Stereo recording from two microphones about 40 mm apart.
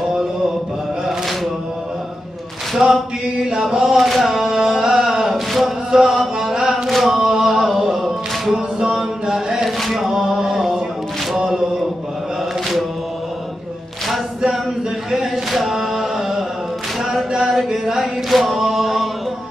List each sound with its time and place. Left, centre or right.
2.8 s chant: centre
5.9 s music: centre
6.5 s chant: centre
6.9 s chant: centre
7.2 s a sound: centre
8.7 s mantra: centre
9.8 s chant: centre
10.0 s a sound: centre
11.3 s mantra: centre
15.0 s a sound: centre
17.3 s chant: centre